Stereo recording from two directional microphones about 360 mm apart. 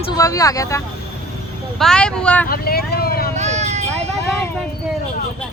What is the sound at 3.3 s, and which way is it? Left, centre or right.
Vehicle, centre.